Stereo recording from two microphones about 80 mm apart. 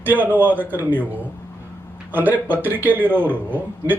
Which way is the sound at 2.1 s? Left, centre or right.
Right.